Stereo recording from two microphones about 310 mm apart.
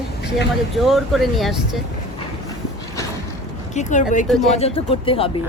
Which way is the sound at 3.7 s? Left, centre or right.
Left.